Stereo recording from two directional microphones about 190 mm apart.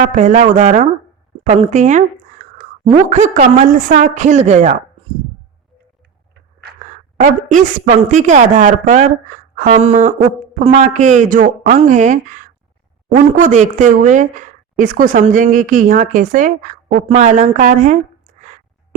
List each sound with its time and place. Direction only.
0.0 s a woman's voice: 40° right (ahead or behind)
7.2 s a woman's voice: 40° right (ahead or behind)